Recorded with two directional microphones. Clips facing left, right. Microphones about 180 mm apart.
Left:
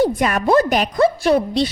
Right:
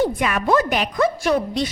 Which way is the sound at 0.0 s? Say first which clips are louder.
Left 3 dB; 40° left (ahead or behind).